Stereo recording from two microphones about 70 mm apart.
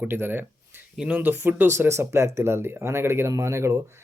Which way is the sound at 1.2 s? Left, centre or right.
Right.